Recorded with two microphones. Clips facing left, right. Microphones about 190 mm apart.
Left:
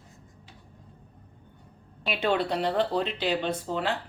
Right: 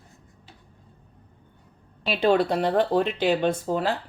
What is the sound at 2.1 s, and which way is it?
Speech, 35° right (ahead or behind).